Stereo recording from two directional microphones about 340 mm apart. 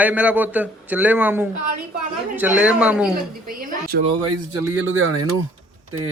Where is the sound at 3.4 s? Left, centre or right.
Right.